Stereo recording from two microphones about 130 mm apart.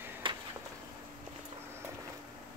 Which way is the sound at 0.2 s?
40° right (ahead or behind).